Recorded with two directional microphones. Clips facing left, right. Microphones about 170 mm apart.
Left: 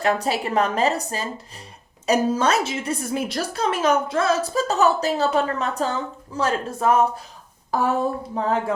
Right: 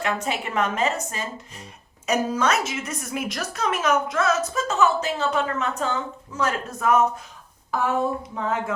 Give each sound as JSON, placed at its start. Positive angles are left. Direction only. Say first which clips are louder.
{"t": 0.0, "sound": "a woman's voice", "louder": "left 4 dB", "side_deg": 35}